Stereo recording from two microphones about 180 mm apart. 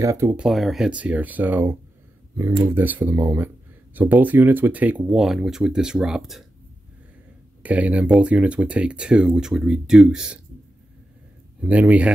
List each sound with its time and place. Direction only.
0.0 s speech: 15° right (ahead or behind)
0.5 s speech: centre (ahead or behind)
7.6 s speech: 5° right (ahead or behind)
11.6 s speech: 10° right (ahead or behind)